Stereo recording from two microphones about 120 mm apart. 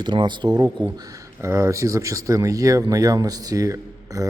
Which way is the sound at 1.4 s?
25° right (ahead or behind).